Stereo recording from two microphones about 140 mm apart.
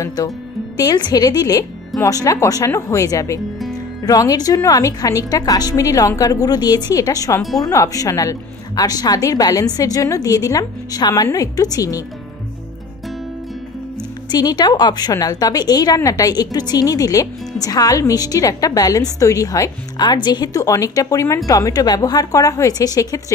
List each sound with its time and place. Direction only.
0.0 s a woman's voice: 25° left (ahead or behind)
14.3 s a woman's voice: 30° left (ahead or behind)